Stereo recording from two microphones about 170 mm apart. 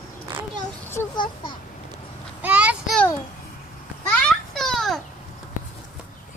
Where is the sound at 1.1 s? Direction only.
30° left (ahead or behind).